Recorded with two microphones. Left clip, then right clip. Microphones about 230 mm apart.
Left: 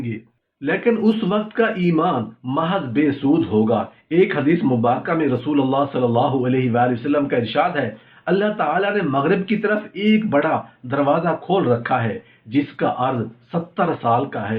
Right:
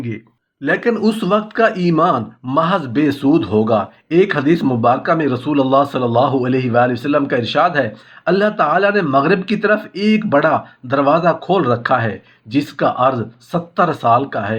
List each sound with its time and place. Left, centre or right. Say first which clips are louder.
0.6 s speech: right 3 dB; right